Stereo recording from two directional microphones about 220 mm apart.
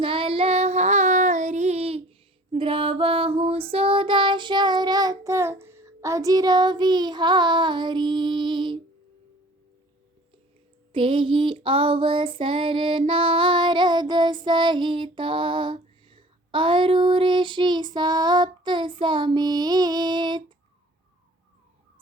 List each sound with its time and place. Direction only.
0.0 s child singing: 25° right (ahead or behind)
10.9 s female singing: 25° right (ahead or behind)